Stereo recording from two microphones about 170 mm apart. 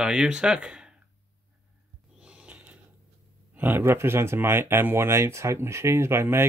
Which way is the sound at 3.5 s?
10° right (ahead or behind).